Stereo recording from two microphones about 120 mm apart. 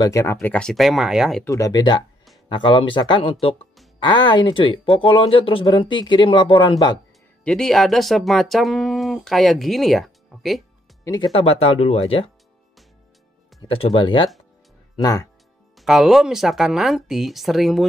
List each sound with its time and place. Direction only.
0.0 s speech: 25° left (ahead or behind); by 1.4 s 5° right (ahead or behind)
1.4 s speech: 30° left (ahead or behind)
2.5 s speech: 45° left (ahead or behind)
4.0 s speech: 40° left (ahead or behind)
7.4 s speech: 5° left (ahead or behind)
11.3 s speech: 55° left (ahead or behind)
13.7 s speech: 50° left (ahead or behind)
15.0 s speech: 30° left (ahead or behind)
15.8 s speech: centre (ahead or behind)